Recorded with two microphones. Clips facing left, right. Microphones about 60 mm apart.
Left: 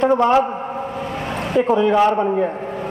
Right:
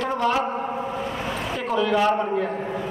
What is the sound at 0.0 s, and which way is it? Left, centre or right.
Speech, left.